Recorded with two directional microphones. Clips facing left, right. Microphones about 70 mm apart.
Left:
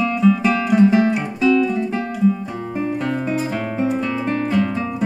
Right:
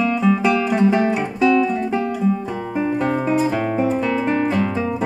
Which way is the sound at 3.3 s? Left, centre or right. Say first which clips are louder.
Right 4 dB; centre.